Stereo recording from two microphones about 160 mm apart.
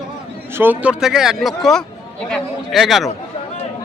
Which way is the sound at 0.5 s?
10° right (ahead or behind).